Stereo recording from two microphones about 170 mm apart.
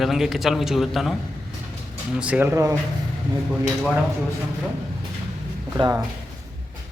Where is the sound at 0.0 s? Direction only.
Centre (ahead or behind).